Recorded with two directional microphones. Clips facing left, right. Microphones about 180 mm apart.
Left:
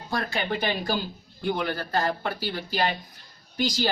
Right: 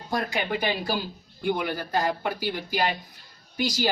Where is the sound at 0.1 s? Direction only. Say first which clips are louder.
Right 1 dB; 15° right (ahead or behind).